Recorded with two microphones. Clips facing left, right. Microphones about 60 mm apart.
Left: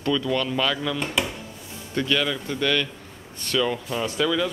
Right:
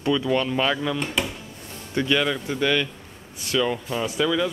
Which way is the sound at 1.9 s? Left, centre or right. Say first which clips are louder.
Right 2 dB; centre.